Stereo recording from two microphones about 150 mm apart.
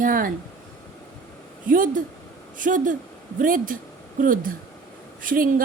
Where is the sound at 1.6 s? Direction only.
65° right (ahead or behind).